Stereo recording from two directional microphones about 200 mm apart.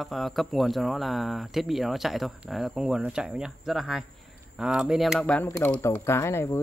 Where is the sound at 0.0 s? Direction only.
Centre (ahead or behind).